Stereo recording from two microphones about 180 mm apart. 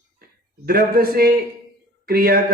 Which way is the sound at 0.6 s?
55° right (ahead or behind).